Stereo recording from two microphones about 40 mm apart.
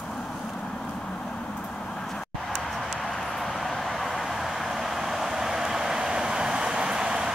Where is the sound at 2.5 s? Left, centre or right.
Centre.